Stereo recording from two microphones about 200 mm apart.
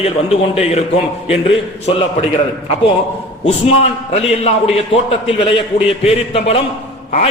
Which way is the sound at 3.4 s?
30° left (ahead or behind).